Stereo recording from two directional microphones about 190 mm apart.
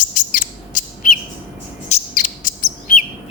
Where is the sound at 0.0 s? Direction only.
45° left (ahead or behind).